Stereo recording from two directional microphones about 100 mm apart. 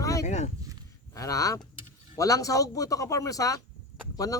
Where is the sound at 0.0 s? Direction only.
35° left (ahead or behind).